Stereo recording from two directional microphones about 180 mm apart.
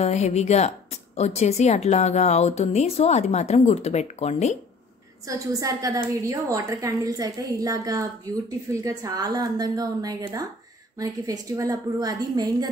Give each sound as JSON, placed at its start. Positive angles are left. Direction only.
{"t": 0.0, "sound": "a woman's voice", "side_deg": 40}
{"t": 5.2, "sound": "a woman's voice", "side_deg": -20}